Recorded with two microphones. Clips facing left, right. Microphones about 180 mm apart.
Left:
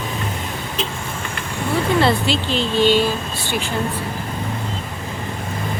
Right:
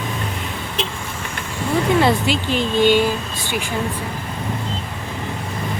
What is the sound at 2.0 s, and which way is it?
Speech, 10° right (ahead or behind).